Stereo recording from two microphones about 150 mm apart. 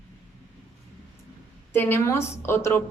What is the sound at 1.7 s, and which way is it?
A woman's voice, 15° left (ahead or behind).